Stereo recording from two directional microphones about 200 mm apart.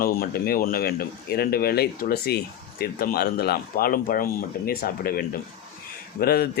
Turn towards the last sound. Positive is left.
turn(degrees=50)  # may be behind; listen again after turning